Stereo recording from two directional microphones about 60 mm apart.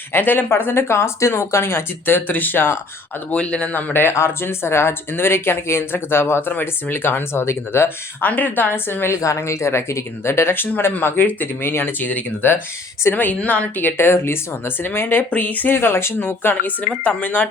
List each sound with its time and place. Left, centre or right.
0.1 s speech: left
3.3 s speech: centre; by 6.5 s left
6.5 s speech: left
8.2 s speech: left
9.2 s a woman's voice: left
13.9 s a woman's voice: left